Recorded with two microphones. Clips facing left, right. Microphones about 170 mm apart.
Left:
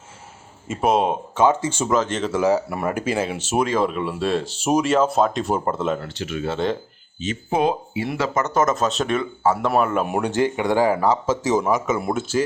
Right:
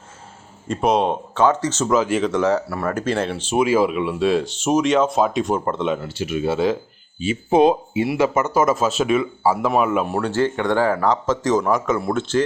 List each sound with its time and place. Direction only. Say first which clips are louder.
0.7 s speech: right 1 dB; 5° left (ahead or behind)
1.9 s speech: right 3 dB; 10° right (ahead or behind)
2.2 s speech: right 1 dB; 5° left (ahead or behind)
3.6 s speech: right 4 dB; 5° right (ahead or behind)
6.0 s speech: right 4 dB; 10° right (ahead or behind)
7.5 s speech: right 6 dB; 20° right (ahead or behind)
8.0 s speech: right 4 dB; 10° right (ahead or behind)
10.1 s speech: even; 15° left (ahead or behind)